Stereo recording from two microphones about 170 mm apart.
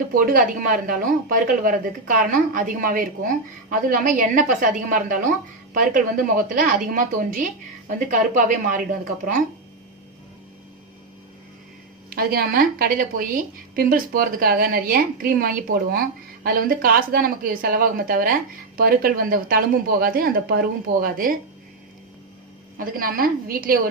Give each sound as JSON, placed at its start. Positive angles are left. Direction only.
{"t": 0.1, "sound": "speech", "side_deg": -55}
{"t": 12.1, "sound": "a woman's voice", "side_deg": -60}
{"t": 22.8, "sound": "a woman's voice", "side_deg": -55}